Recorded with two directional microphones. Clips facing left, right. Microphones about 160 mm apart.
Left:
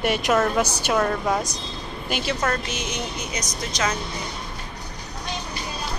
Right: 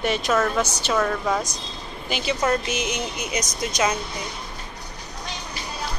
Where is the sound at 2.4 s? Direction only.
15° right (ahead or behind).